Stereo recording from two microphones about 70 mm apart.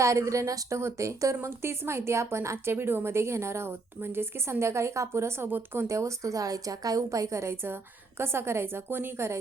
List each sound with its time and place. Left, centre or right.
0.0 s a woman's voice: right
5.5 s speech: right
5.9 s a woman's voice: right